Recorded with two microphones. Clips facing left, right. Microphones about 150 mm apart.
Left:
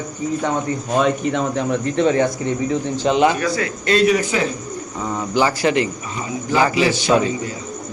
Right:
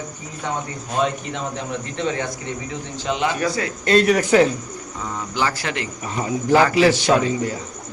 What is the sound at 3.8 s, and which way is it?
Speech, 50° right (ahead or behind).